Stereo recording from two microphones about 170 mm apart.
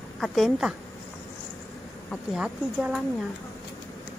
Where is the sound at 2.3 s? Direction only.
5° right (ahead or behind).